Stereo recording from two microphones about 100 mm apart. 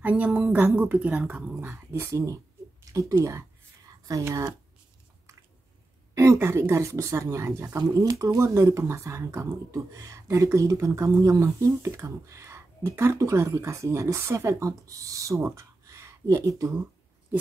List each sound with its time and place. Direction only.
0.0 s speech: 15° right (ahead or behind)
3.8 s a sound: 35° right (ahead or behind)
6.1 s a woman's voice: 30° right (ahead or behind)